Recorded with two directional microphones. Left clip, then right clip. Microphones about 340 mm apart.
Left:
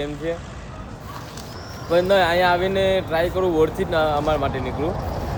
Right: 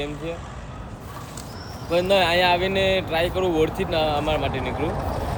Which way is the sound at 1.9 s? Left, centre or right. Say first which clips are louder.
Left 2 dB; centre.